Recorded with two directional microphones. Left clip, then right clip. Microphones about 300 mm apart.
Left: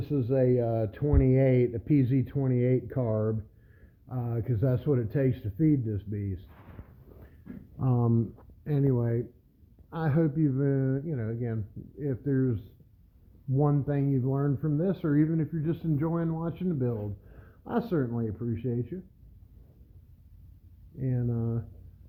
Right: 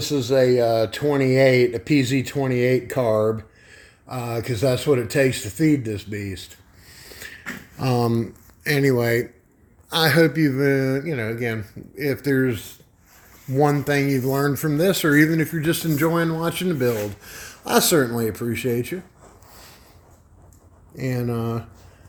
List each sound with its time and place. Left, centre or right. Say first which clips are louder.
0.0 s speech: right 9 dB; centre
7.9 s speech: right 9 dB; centre
13.6 s speech: right 10 dB; centre
14.3 s speech: right 9 dB; right
21.0 s speech: right 9 dB; centre